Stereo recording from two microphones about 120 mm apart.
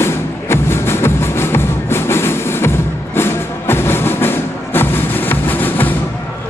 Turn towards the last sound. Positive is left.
turn(degrees=15)  # may be behind; listen again after turning